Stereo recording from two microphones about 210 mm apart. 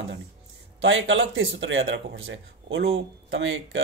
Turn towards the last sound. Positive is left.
turn(degrees=-65)  # may be behind; listen again after turning